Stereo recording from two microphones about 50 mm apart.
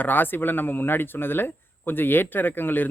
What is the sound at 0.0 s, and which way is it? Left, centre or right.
Speech, left.